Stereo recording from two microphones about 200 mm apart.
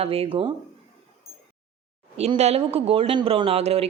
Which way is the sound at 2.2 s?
30° right (ahead or behind).